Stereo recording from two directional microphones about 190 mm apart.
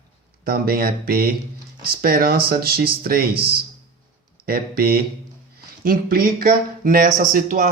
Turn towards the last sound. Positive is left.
turn(degrees=-45)  # may be behind; listen again after turning